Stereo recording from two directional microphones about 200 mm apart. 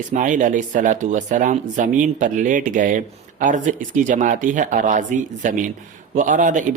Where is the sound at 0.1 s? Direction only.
40° right (ahead or behind).